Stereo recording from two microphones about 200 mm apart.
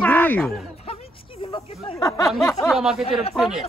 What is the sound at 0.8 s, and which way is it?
Speech, 25° left (ahead or behind).